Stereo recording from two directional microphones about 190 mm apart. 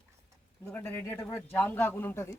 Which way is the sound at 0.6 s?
10° left (ahead or behind).